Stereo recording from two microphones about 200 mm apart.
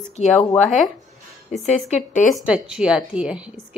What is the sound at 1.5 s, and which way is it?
Speech, 35° left (ahead or behind).